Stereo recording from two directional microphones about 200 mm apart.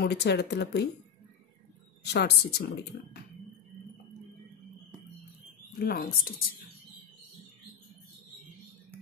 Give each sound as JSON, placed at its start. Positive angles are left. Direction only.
{"t": 0.0, "sound": "speech", "side_deg": 55}
{"t": 2.0, "sound": "a woman's voice", "side_deg": 55}
{"t": 5.8, "sound": "a woman's voice", "side_deg": 45}